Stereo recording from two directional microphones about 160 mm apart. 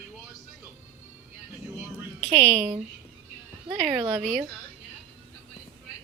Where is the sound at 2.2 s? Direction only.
35° right (ahead or behind).